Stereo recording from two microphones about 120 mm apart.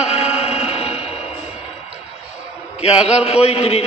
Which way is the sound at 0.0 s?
60° left (ahead or behind).